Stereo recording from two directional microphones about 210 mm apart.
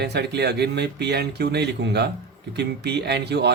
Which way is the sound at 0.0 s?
50° right (ahead or behind).